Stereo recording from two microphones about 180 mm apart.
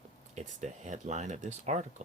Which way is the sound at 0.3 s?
40° right (ahead or behind).